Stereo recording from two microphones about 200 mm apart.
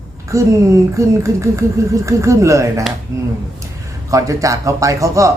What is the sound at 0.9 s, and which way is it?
A woman's voice, 15° right (ahead or behind).